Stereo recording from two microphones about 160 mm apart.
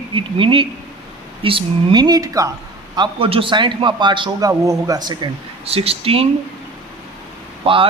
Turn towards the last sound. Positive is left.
turn(degrees=-35)  # may be behind; listen again after turning